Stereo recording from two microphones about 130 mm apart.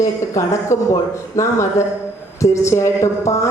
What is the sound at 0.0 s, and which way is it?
Speech, 25° left (ahead or behind).